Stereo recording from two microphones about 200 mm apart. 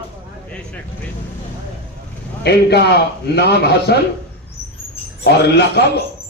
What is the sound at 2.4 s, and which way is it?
A man's voice, 55° left (ahead or behind).